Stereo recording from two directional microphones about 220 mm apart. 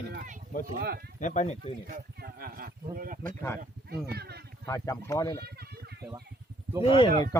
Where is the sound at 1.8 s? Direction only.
45° right (ahead or behind).